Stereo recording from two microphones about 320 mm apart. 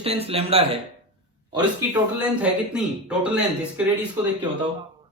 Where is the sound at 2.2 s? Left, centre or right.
Centre.